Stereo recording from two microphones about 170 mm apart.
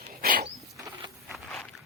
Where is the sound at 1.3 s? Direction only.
Centre (ahead or behind).